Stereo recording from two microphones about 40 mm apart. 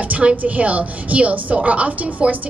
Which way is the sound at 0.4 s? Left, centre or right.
Right.